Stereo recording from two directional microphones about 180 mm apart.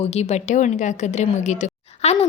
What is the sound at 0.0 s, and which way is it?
A woman's voice, 35° left (ahead or behind).